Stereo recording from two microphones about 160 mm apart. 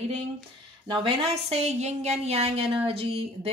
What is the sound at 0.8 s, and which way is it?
A woman's voice, 30° right (ahead or behind).